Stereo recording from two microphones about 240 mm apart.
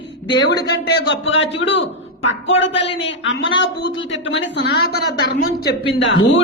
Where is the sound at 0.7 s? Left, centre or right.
Left.